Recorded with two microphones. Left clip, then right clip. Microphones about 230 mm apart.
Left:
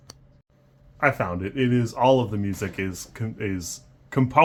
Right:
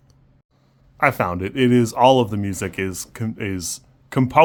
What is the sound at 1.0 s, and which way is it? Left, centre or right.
Speech, right.